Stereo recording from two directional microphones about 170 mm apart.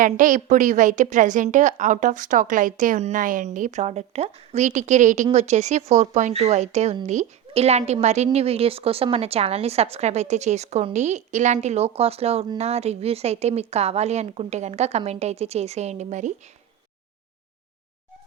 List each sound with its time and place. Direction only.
0.0 s a woman's voice: 50° right (ahead or behind)